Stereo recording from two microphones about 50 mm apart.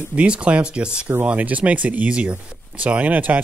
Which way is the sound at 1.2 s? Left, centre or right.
Right.